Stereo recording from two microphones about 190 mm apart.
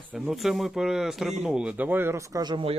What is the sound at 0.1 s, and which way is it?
A man's voice, centre (ahead or behind).